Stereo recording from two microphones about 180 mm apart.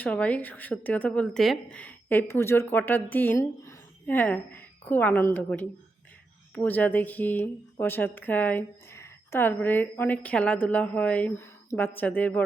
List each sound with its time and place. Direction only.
0.0 s a woman's voice: 5° left (ahead or behind)